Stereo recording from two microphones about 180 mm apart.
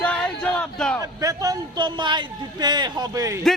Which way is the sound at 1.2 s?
20° right (ahead or behind).